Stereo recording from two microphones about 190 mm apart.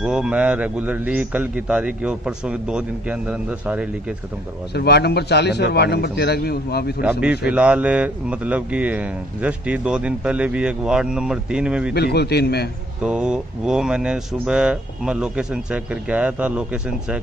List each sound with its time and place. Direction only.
0.0 s a man's voice: 5° right (ahead or behind)
4.7 s a man's voice: 60° left (ahead or behind)
7.0 s a man's voice: 5° right (ahead or behind)
11.9 s a man's voice: 60° left (ahead or behind)
13.0 s speech: 5° right (ahead or behind)